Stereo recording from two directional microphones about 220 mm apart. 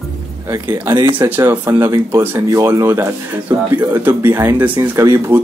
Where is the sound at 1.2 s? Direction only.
10° right (ahead or behind).